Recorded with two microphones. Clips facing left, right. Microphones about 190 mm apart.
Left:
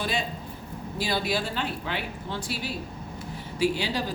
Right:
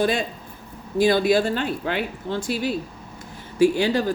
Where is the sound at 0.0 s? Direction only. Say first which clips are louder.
Right 7 dB; 50° right (ahead or behind).